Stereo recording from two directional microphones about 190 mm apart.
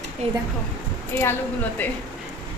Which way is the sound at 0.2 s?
35° right (ahead or behind).